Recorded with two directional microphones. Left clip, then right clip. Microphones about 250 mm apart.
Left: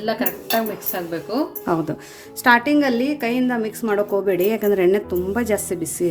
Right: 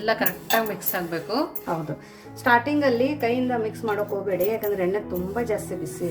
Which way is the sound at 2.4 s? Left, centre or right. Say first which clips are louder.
Left 4 dB; left.